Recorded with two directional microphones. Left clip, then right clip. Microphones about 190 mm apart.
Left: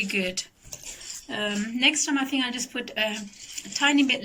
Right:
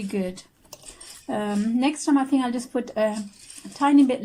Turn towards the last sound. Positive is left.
turn(degrees=-35)  # may be behind; listen again after turning